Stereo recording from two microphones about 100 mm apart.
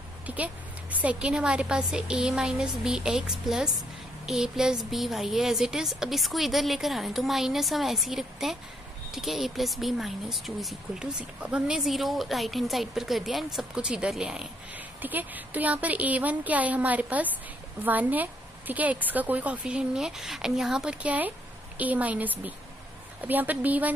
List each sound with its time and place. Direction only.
0.3 s a woman's voice: 15° right (ahead or behind)
15.0 s a woman's voice: 20° right (ahead or behind)